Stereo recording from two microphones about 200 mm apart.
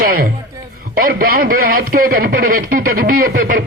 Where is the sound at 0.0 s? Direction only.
45° right (ahead or behind).